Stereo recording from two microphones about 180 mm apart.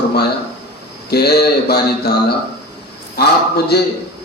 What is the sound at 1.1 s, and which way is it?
A man's voice, 60° left (ahead or behind).